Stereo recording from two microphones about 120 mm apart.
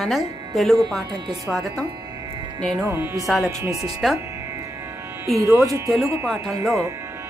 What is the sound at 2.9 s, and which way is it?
Speech, 25° right (ahead or behind).